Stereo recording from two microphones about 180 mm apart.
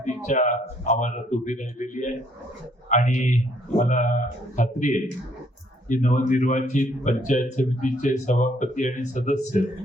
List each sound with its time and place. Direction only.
0.0 s speech: 45° left (ahead or behind)